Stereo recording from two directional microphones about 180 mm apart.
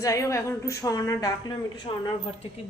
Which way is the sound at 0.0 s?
15° left (ahead or behind).